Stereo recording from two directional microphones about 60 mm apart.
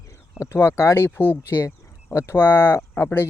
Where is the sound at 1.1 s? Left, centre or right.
Left.